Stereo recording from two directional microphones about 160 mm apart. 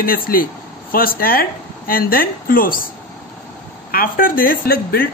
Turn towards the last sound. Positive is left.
turn(degrees=65)  # may be behind; listen again after turning